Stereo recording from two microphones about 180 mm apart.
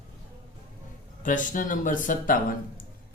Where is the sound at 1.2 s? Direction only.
45° left (ahead or behind).